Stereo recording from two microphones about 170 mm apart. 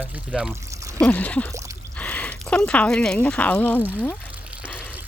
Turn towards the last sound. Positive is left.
turn(degrees=10)  # may be behind; listen again after turning